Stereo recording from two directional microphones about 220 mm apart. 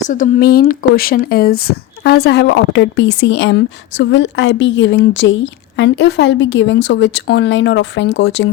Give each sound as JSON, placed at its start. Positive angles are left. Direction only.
{"t": 0.1, "sound": "speech", "side_deg": 40}